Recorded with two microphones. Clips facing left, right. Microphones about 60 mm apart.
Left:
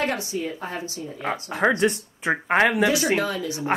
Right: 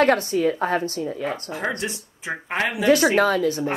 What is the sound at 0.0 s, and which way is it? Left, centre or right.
A woman's voice, right.